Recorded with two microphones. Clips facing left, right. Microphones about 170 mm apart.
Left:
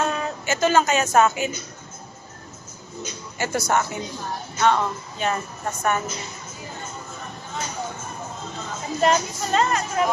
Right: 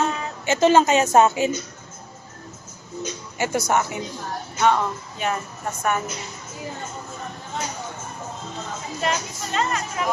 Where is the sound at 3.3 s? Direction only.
15° right (ahead or behind).